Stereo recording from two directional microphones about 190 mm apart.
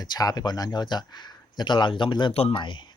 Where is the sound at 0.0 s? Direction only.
20° left (ahead or behind).